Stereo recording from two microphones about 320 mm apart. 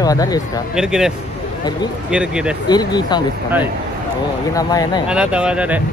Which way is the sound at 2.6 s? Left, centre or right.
Centre.